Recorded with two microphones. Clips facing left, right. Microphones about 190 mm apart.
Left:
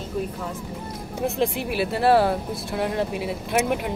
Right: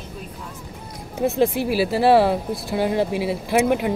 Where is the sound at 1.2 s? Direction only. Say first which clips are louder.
Right 5 dB; centre (ahead or behind).